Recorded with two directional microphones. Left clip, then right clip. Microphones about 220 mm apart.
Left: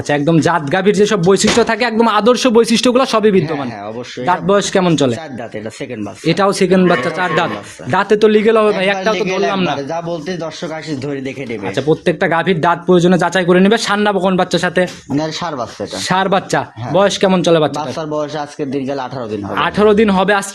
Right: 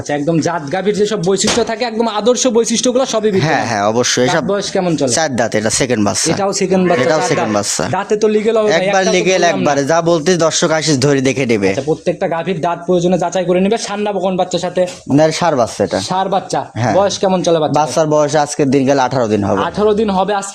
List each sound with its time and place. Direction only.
0.1 s speech: 20° left (ahead or behind)
3.5 s a man's voice: 50° right (ahead or behind)
4.4 s speech: 20° left (ahead or behind)
6.4 s speech: 15° left (ahead or behind)
9.1 s a man's voice: 55° right (ahead or behind)
12.0 s speech: 20° left (ahead or behind)
15.2 s a man's voice: 50° right (ahead or behind)
16.9 s speech: 15° left (ahead or behind)
17.7 s a man's voice: 50° right (ahead or behind)
19.5 s speech: 20° left (ahead or behind)